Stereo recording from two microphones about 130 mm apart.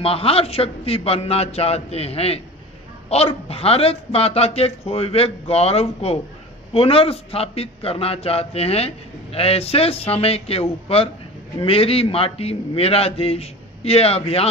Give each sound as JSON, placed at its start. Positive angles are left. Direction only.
{"t": 0.0, "sound": "a man's voice", "side_deg": 50}